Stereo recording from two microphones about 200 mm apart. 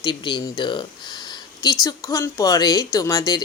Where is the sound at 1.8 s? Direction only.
15° left (ahead or behind).